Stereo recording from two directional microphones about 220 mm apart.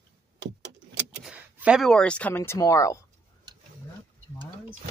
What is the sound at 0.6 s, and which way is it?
Vehicle, 55° right (ahead or behind).